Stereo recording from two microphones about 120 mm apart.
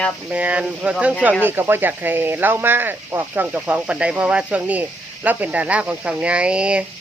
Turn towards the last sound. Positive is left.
turn(degrees=-10)  # may be behind; listen again after turning